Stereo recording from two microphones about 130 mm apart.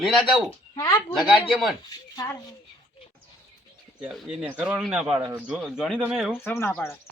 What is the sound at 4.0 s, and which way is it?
A man's voice, centre (ahead or behind).